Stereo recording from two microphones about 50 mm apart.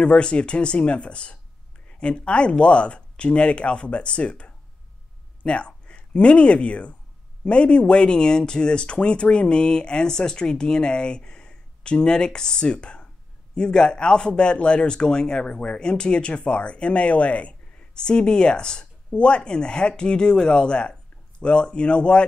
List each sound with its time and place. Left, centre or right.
0.0 s speech: left